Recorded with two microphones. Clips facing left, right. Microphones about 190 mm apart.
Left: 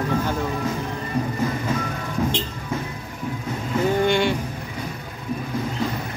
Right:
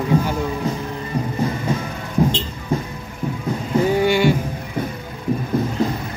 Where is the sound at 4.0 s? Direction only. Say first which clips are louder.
Right 3 dB; 5° right (ahead or behind).